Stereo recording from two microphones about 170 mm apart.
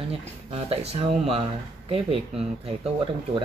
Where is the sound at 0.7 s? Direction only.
35° right (ahead or behind).